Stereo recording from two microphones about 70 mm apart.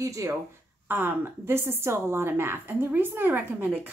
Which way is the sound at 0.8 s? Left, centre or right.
Right.